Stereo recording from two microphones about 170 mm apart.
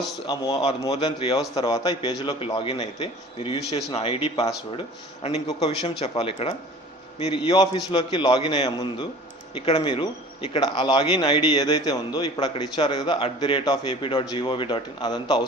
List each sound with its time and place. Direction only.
0.3 s a man's voice: 25° left (ahead or behind)